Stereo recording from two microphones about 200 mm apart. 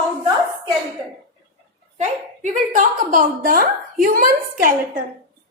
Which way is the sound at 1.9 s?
35° right (ahead or behind).